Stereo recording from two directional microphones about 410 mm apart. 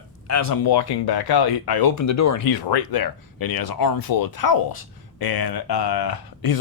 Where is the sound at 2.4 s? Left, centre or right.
Left.